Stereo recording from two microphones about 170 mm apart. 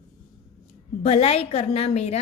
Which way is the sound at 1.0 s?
35° left (ahead or behind).